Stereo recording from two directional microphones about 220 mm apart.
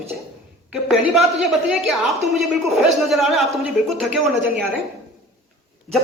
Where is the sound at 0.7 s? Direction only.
5° right (ahead or behind).